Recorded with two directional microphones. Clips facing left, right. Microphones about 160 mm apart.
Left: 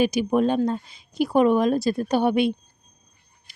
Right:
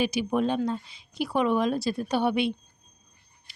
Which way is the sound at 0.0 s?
45° left (ahead or behind).